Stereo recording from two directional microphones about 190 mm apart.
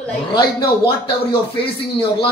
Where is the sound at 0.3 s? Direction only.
20° left (ahead or behind).